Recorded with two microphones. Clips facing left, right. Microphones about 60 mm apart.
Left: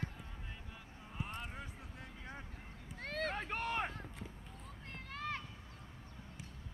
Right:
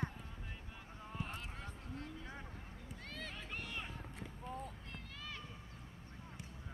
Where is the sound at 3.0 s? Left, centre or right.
Left.